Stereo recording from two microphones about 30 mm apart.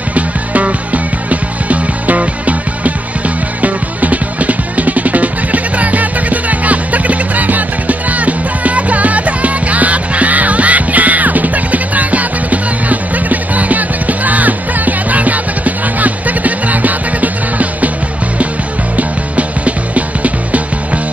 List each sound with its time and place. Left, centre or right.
0.1 s music: right
18.9 s music: right